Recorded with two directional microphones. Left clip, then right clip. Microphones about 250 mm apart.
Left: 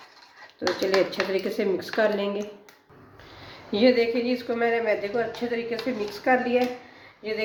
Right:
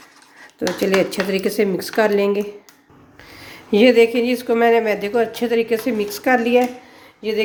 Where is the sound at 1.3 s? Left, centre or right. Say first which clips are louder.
Right 6 dB; right.